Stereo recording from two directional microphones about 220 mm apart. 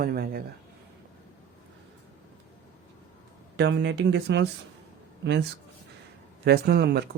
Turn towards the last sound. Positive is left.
turn(degrees=-45)  # may be behind; listen again after turning